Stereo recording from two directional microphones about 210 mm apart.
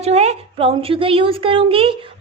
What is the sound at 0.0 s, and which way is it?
A child's voice, 30° right (ahead or behind).